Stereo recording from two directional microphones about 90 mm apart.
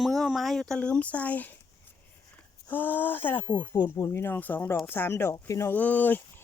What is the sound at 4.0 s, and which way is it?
Speech, 30° left (ahead or behind).